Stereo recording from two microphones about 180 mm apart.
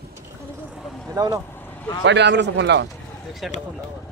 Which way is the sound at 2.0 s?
75° right (ahead or behind).